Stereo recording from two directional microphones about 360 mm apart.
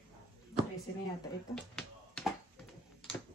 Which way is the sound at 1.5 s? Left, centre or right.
Centre.